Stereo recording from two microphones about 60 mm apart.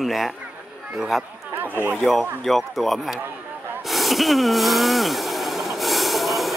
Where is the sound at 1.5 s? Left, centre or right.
Right.